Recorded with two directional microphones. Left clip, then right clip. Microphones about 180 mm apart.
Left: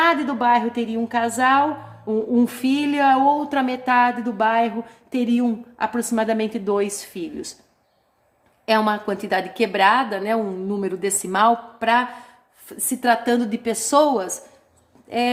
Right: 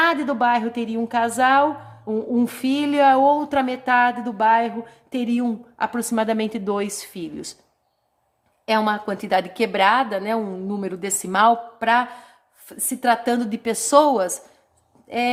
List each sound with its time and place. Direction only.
0.0 s a woman's voice: 35° right (ahead or behind)
8.6 s a woman's voice: 30° right (ahead or behind)